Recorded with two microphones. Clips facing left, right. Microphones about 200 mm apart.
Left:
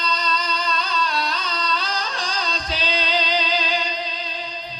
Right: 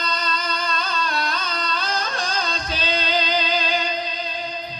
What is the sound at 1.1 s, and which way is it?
Music, 50° right (ahead or behind).